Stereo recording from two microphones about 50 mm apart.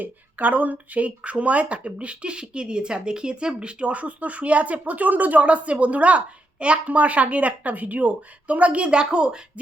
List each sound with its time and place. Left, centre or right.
0.0 s speech: right; by 9.4 s centre